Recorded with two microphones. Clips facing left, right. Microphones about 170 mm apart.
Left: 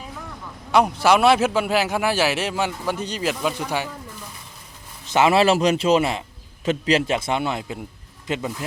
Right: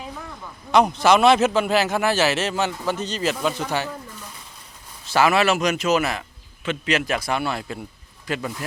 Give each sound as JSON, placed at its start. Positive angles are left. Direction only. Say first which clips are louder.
{"t": 0.7, "sound": "a man's voice", "louder": "right 1 dB", "side_deg": 10}
{"t": 5.0, "sound": "a man's voice", "louder": "left 2 dB", "side_deg": 20}